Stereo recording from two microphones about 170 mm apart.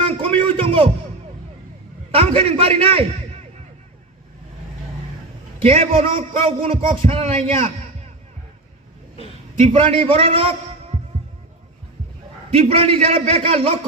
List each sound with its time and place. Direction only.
0.1 s a sound: 35° right (ahead or behind)
2.1 s a man's voice: 35° right (ahead or behind)
5.6 s a man's voice: 35° right (ahead or behind)
9.6 s a man's voice: 35° right (ahead or behind)
12.5 s a man's voice: 35° right (ahead or behind)